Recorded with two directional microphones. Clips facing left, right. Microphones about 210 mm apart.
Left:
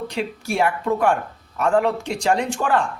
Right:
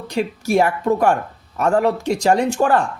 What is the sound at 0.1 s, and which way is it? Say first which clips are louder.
Speech: right 6 dB; 40° right (ahead or behind).